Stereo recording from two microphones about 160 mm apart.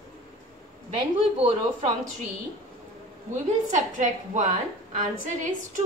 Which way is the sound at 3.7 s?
50° right (ahead or behind).